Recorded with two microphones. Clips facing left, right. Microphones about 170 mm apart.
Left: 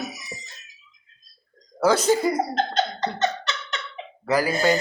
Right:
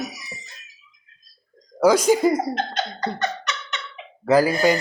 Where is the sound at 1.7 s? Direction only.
10° right (ahead or behind).